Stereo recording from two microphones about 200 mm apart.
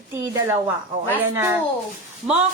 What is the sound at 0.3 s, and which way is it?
A woman's voice, 15° right (ahead or behind).